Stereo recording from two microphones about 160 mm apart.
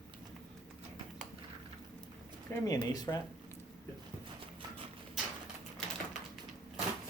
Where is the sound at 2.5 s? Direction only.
25° left (ahead or behind).